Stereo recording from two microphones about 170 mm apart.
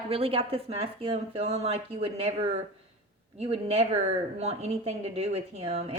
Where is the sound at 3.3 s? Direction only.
35° right (ahead or behind).